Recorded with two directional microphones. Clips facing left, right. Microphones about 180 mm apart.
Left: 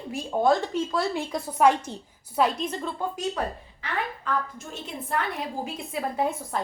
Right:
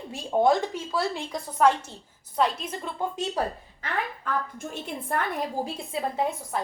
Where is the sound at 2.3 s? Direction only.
Centre (ahead or behind); by 3.2 s 15° right (ahead or behind).